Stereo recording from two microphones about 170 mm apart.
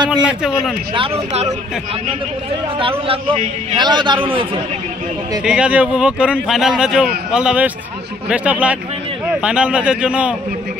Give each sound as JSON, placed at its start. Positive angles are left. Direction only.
{"t": 0.2, "sound": "a man's voice", "side_deg": -5}
{"t": 0.9, "sound": "a man's voice", "side_deg": -35}
{"t": 2.8, "sound": "a man's voice", "side_deg": -30}
{"t": 5.4, "sound": "a man's voice", "side_deg": -5}